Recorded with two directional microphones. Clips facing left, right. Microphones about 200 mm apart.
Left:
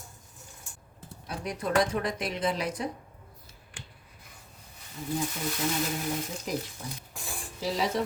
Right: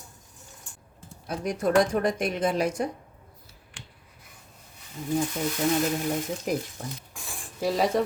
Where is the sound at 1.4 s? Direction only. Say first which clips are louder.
Right 5 dB; 45° right (ahead or behind).